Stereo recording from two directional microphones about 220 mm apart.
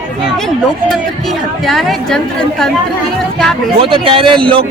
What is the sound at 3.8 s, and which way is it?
Speech, 25° right (ahead or behind).